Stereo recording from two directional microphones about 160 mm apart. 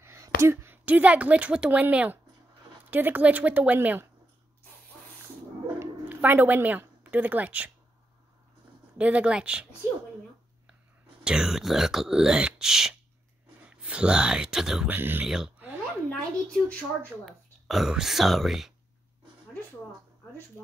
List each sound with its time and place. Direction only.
0.0 s a sound: 15° right (ahead or behind)
0.4 s a woman's voice: 15° right (ahead or behind)
5.8 s speech: 10° right (ahead or behind)
8.9 s a woman's voice: 5° right (ahead or behind)
11.2 s a woman's voice: 5° right (ahead or behind)
15.2 s a sound: 5° right (ahead or behind)
17.2 s speech: 5° right (ahead or behind)